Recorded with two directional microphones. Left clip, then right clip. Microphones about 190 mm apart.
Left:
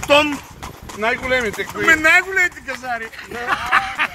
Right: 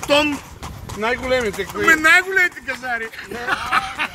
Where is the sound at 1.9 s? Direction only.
5° right (ahead or behind).